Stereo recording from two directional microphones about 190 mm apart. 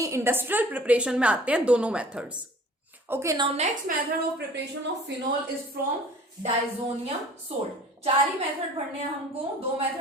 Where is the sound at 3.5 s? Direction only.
35° right (ahead or behind).